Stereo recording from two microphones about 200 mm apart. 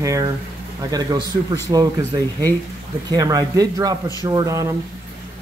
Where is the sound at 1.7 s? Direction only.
20° right (ahead or behind).